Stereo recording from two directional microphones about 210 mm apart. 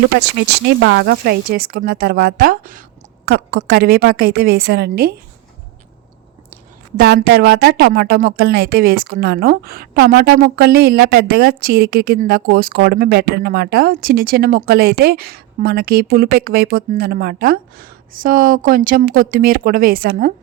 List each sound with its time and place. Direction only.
0.8 s a woman's voice: 55° right (ahead or behind)
6.9 s a woman's voice: 50° right (ahead or behind)